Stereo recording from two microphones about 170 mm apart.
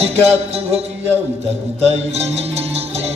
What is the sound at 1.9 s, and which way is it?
Music, 40° right (ahead or behind).